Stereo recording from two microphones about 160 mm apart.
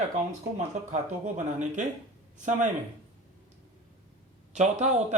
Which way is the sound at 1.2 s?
50° right (ahead or behind).